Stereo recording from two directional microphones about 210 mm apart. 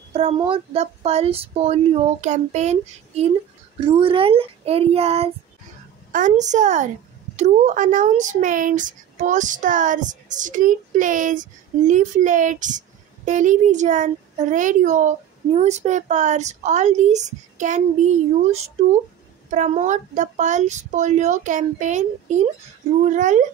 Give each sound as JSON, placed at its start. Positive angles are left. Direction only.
{"t": 0.1, "sound": "speech", "side_deg": -25}